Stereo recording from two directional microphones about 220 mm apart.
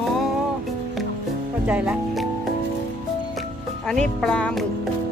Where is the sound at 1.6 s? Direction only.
5° right (ahead or behind).